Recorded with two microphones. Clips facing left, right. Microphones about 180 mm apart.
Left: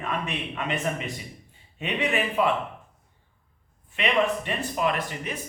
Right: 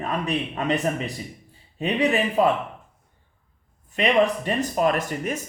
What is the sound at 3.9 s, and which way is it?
Speech, 40° right (ahead or behind).